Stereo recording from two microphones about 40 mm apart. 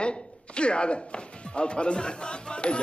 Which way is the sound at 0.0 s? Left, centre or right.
Left.